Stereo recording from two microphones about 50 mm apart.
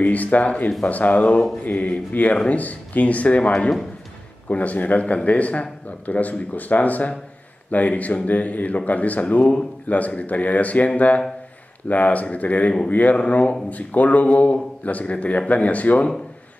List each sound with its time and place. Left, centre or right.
0.0 s speech: left